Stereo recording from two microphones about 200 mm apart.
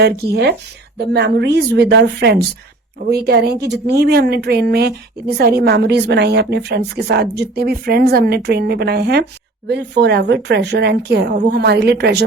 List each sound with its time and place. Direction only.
0.9 s a woman's voice: 55° right (ahead or behind)